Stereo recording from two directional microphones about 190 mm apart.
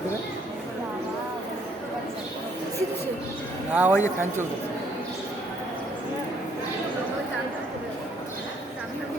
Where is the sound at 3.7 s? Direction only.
10° right (ahead or behind).